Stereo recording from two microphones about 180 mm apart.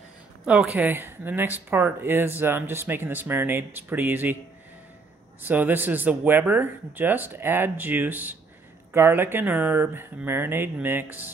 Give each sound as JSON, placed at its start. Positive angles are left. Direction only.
{"t": 0.5, "sound": "speech", "side_deg": -10}
{"t": 5.4, "sound": "speech", "side_deg": -10}